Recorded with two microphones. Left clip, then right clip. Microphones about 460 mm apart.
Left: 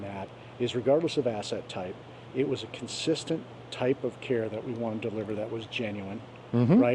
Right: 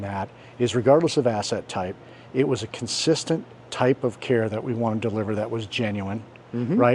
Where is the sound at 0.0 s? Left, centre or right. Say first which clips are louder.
Right 8 dB; right.